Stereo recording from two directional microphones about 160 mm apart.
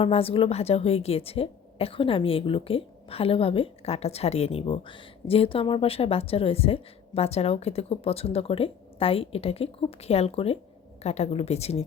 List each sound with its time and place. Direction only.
0.0 s a woman's voice: 35° left (ahead or behind)